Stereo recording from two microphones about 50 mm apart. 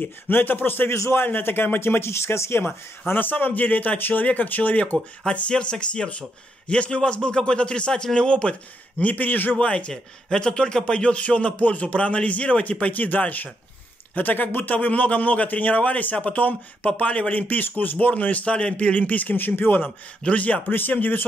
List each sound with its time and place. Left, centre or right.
0.0 s speech: left
3.1 s a man's voice: left
5.2 s a man's voice: left
9.0 s a man's voice: left
20.2 s a man's voice: left